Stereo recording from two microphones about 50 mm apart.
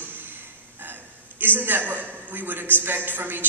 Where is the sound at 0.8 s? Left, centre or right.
Right.